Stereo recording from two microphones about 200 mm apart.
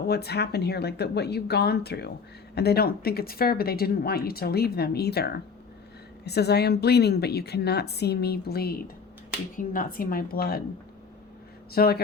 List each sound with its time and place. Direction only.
0.1 s a woman's voice: 55° left (ahead or behind)
11.7 s speech: 50° left (ahead or behind)